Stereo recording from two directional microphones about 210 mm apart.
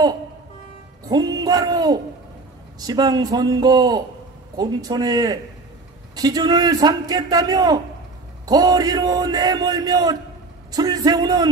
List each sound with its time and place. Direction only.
1.0 s a man's voice: 20° right (ahead or behind)